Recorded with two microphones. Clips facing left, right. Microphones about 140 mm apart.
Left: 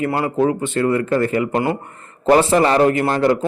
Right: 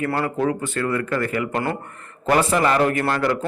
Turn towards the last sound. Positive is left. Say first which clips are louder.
# left 5 dB
turn(degrees=25)  # may be behind; listen again after turning